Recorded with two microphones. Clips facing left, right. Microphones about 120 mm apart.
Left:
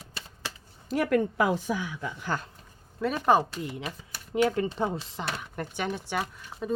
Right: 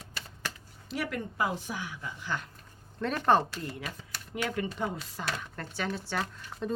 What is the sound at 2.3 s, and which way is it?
Speech, 40° left (ahead or behind).